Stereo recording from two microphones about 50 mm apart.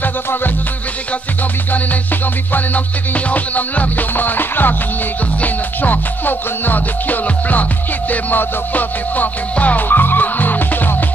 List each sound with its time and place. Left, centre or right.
0.0 s music: left
3.3 s music: left